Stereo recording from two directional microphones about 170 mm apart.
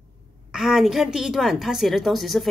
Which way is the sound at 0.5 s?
Centre (ahead or behind).